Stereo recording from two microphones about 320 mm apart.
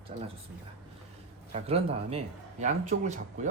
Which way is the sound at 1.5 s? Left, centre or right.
Centre.